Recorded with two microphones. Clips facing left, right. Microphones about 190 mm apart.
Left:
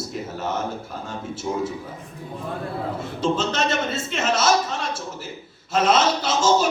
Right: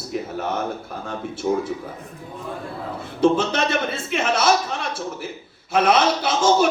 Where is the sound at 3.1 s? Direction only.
60° right (ahead or behind).